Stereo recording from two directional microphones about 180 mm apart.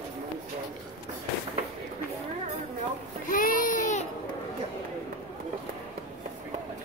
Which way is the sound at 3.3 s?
50° left (ahead or behind).